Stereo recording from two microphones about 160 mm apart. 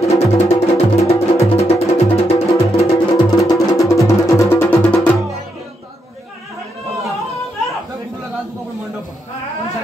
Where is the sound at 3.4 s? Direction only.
20° left (ahead or behind).